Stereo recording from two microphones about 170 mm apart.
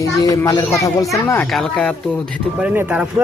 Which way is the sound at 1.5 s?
5° left (ahead or behind).